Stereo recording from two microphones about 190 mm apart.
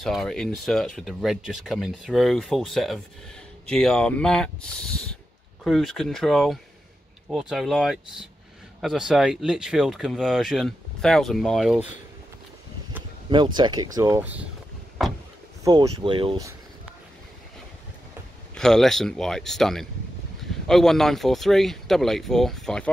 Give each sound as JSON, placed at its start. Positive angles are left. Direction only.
{"t": 0.0, "sound": "speech", "side_deg": 0}
{"t": 13.3, "sound": "speech", "side_deg": -25}
{"t": 15.6, "sound": "speech", "side_deg": -20}
{"t": 18.5, "sound": "speech", "side_deg": 5}